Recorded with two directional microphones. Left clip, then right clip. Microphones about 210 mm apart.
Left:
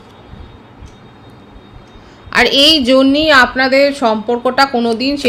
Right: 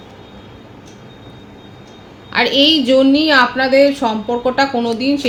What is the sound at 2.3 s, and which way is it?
A man's voice, 50° left (ahead or behind).